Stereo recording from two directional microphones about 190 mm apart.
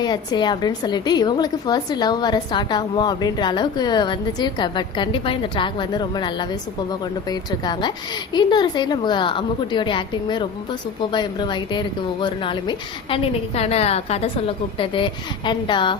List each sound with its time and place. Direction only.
0.0 s a woman's voice: 20° left (ahead or behind)